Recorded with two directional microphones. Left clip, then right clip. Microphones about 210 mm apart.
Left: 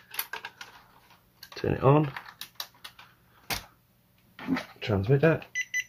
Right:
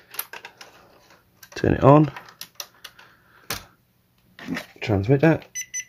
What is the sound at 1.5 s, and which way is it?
Speech, 45° right (ahead or behind).